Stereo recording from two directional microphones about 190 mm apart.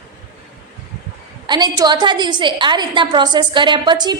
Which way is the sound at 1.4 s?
20° right (ahead or behind).